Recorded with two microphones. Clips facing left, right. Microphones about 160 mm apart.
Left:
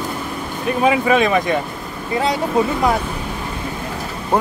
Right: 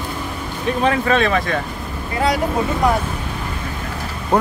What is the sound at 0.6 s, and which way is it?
Speech, 10° left (ahead or behind).